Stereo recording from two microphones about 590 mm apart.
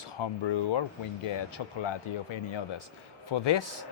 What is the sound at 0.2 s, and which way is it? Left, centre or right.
Speech, left.